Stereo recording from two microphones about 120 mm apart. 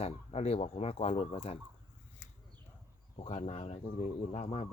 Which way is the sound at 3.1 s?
55° left (ahead or behind).